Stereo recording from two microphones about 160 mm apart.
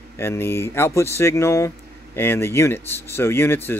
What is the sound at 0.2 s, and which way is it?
Speech, 15° left (ahead or behind).